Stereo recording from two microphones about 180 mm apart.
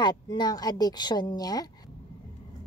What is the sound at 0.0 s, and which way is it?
Child singing, 25° left (ahead or behind).